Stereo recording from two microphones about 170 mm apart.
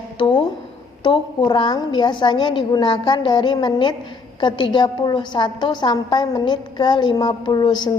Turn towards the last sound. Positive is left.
turn(degrees=25)  # may be behind; listen again after turning